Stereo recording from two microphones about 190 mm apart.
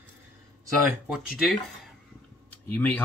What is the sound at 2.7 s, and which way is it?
Speech, 10° left (ahead or behind).